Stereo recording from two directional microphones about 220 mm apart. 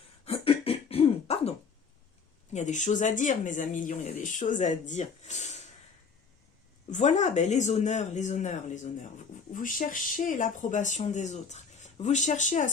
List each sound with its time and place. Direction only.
0.3 s beatboxing: 25° left (ahead or behind)
2.5 s speech: 30° left (ahead or behind)
6.9 s speech: 30° left (ahead or behind)